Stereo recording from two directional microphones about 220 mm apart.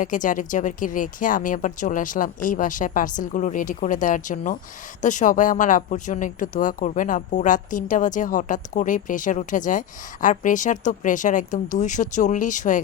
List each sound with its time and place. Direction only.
0.0 s speech: 35° left (ahead or behind)